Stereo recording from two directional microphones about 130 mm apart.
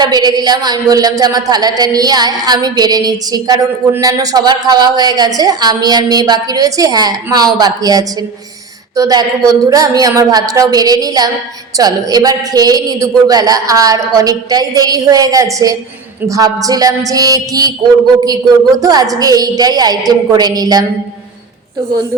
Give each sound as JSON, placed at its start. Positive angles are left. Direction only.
{"t": 0.0, "sound": "speech", "side_deg": -30}